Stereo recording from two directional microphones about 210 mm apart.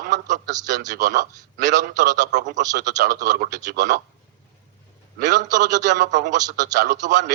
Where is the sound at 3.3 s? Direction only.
40° right (ahead or behind).